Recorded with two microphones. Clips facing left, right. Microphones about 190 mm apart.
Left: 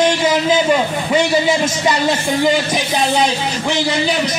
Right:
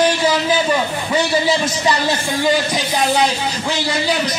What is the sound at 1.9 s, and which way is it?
Speech, 20° left (ahead or behind).